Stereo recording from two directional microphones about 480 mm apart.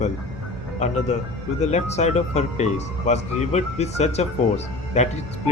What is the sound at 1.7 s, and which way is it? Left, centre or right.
Speech, centre.